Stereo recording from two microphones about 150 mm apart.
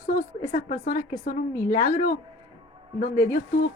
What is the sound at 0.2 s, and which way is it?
Speech, 45° left (ahead or behind).